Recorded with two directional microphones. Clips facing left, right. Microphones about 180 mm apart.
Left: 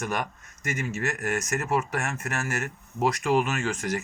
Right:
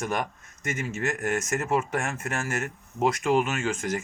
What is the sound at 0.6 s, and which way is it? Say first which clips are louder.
Speech: even; 25° right (ahead or behind).